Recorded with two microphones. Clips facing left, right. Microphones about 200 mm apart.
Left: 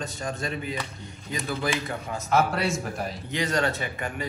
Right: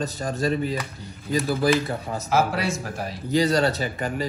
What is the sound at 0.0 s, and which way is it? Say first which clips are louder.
Speech: right 6 dB; 35° right (ahead or behind).